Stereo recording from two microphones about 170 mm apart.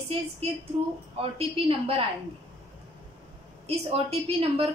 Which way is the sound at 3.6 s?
35° right (ahead or behind).